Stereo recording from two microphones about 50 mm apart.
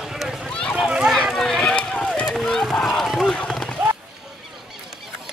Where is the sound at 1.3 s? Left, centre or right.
Centre.